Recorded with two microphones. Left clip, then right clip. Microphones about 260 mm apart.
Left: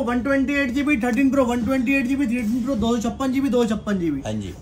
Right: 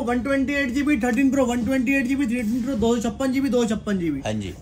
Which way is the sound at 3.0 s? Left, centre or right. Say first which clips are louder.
Left 1 dB; left.